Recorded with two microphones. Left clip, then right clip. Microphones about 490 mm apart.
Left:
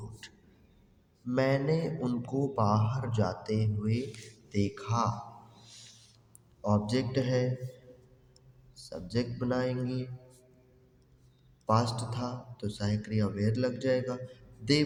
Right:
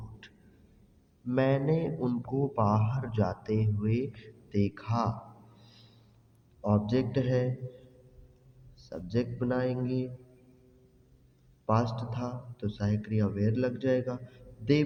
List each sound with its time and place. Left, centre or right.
0.2 s music: right
1.3 s speech: right
6.6 s speech: right
8.9 s speech: right
11.6 s a man's voice: right